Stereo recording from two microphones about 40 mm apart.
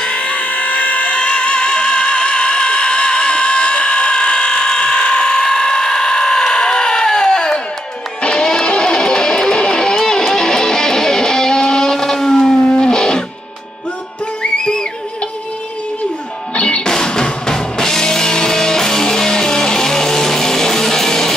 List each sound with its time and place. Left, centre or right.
0.0 s music: left
14.4 s music: centre
16.5 s music: left
16.8 s music: centre